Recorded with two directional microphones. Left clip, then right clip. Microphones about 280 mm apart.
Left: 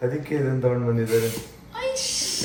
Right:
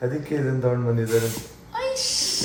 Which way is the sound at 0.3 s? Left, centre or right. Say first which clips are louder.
Even; centre.